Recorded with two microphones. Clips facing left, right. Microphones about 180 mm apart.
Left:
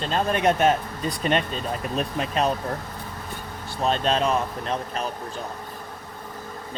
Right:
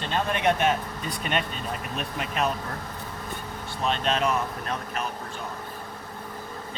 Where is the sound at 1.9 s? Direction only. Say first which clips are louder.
Left 5 dB; 35° left (ahead or behind).